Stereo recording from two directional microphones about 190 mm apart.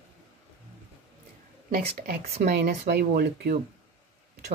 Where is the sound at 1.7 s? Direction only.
50° right (ahead or behind).